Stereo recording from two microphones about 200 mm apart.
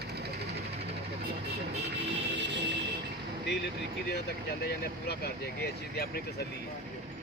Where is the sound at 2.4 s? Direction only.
60° right (ahead or behind).